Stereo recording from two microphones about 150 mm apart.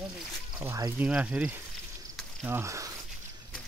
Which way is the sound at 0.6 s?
20° right (ahead or behind).